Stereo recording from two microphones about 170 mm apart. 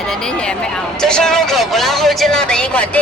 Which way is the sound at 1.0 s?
5° left (ahead or behind).